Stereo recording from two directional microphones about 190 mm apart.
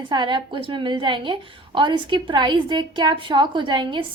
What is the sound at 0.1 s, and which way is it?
A woman's voice, 25° right (ahead or behind).